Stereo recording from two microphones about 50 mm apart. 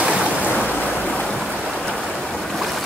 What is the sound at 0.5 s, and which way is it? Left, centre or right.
Waves, left.